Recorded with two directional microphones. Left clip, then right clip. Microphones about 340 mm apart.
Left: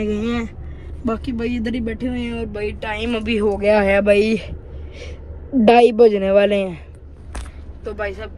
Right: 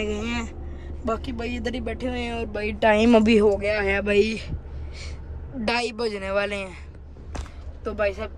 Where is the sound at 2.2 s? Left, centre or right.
Centre.